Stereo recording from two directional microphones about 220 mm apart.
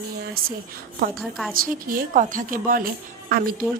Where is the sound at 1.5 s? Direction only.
40° right (ahead or behind).